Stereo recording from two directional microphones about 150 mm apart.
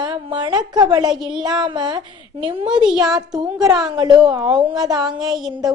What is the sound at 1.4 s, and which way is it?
A woman's voice, 30° right (ahead or behind).